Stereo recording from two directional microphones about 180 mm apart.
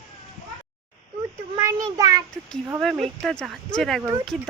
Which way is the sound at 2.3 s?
5° left (ahead or behind).